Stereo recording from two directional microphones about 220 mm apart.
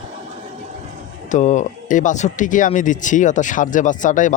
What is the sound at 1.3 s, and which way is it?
Speech, 35° left (ahead or behind).